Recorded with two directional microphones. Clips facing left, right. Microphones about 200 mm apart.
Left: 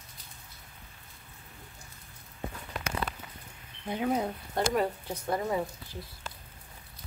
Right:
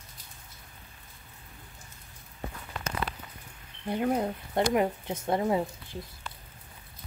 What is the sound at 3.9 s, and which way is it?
Speech, 5° left (ahead or behind).